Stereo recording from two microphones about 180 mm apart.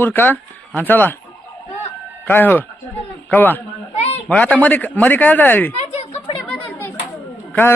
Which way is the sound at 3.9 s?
35° left (ahead or behind).